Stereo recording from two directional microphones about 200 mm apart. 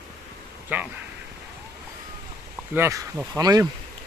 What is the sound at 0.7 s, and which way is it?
Speech, 10° right (ahead or behind).